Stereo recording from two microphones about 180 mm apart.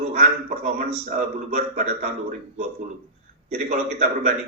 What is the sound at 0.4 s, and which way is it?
Speech, 45° right (ahead or behind).